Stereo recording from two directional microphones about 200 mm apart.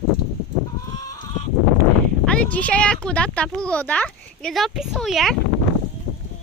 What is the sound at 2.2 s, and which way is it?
Speech, 5° left (ahead or behind).